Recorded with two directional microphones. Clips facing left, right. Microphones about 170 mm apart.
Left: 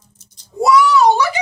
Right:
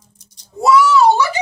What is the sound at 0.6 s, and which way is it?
Speech, 15° left (ahead or behind).